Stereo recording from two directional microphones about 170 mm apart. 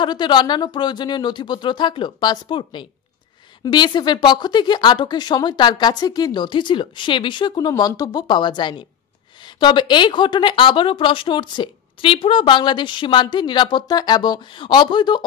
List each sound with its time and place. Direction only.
0.0 s a woman's voice: 25° left (ahead or behind)